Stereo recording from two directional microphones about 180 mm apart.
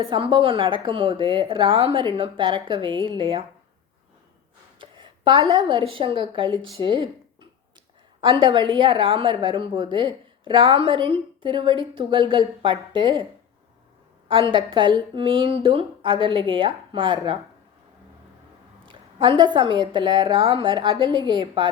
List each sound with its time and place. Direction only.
0.0 s a woman's voice: 25° right (ahead or behind)
4.8 s a woman's voice: 25° right (ahead or behind)
8.2 s a woman's voice: 25° right (ahead or behind)
14.3 s a woman's voice: 30° right (ahead or behind)
19.4 s a woman's voice: 25° right (ahead or behind)